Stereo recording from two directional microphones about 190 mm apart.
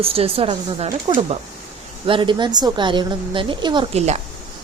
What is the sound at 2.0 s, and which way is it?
A woman's voice, 25° right (ahead or behind).